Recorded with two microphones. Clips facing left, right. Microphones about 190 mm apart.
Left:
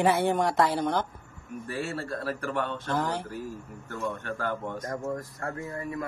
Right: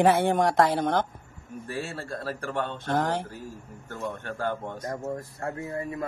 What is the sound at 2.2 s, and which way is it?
Speech, 30° right (ahead or behind).